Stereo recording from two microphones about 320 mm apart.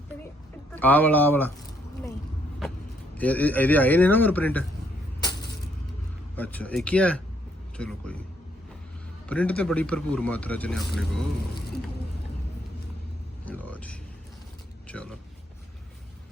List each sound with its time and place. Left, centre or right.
0.8 s speech: centre
3.2 s speech: centre
6.3 s speech: centre
9.3 s speech: centre
13.4 s a sound: centre